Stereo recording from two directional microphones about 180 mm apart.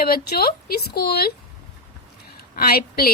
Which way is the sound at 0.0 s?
60° left (ahead or behind).